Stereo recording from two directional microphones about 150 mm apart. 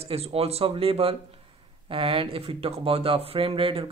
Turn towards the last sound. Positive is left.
turn(degrees=-40)  # may be behind; listen again after turning